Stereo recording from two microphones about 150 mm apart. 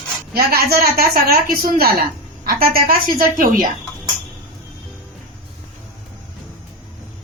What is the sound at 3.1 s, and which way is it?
Speech, 65° right (ahead or behind).